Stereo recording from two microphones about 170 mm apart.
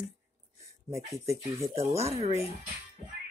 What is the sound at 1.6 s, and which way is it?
Speech, 15° left (ahead or behind).